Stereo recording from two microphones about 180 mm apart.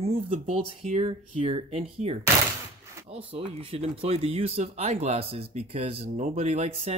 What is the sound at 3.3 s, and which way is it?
Speech, 30° right (ahead or behind).